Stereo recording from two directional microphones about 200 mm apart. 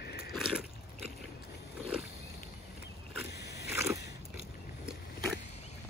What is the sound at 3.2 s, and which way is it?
Biting, 55° left (ahead or behind).